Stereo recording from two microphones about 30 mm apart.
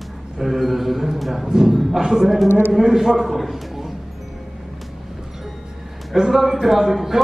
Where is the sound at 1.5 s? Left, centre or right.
Right.